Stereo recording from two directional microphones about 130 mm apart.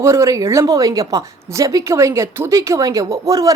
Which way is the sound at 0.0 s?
20° right (ahead or behind).